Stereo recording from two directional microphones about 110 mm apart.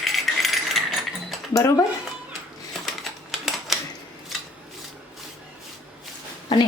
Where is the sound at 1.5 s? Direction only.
30° left (ahead or behind).